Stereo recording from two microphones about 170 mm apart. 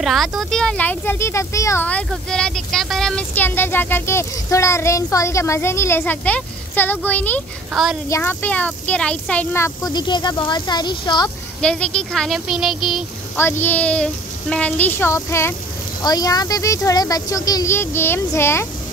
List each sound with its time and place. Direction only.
0.0 s speech: centre (ahead or behind)
7.7 s speech: centre (ahead or behind)
8.1 s speech: 10° left (ahead or behind)
11.6 s speech: 5° left (ahead or behind)
13.4 s a woman's voice: 15° left (ahead or behind)